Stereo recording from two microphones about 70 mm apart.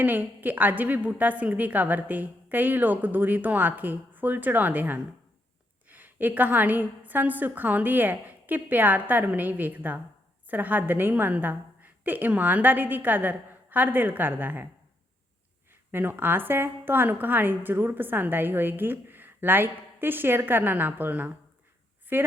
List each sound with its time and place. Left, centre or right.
0.0 s a woman's voice: right
15.9 s a woman's voice: right